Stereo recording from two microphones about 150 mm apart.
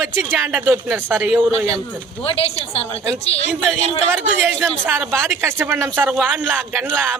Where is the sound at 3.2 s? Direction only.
45° left (ahead or behind).